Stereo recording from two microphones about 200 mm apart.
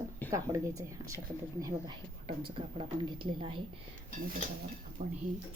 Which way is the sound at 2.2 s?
30° right (ahead or behind).